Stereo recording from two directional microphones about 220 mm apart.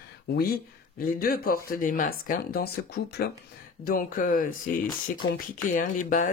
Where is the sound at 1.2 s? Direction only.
40° left (ahead or behind).